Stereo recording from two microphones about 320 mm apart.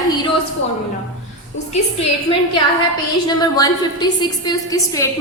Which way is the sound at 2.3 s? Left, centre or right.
Centre.